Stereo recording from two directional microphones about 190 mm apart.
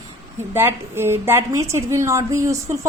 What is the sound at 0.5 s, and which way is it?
A woman's voice, 10° right (ahead or behind).